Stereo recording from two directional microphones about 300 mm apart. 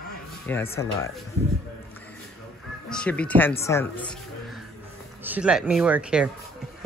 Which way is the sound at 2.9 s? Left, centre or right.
Centre.